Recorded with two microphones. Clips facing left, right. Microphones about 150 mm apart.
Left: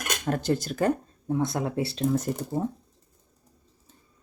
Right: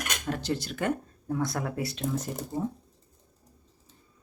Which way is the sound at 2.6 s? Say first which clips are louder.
Left 2 dB; 50° left (ahead or behind).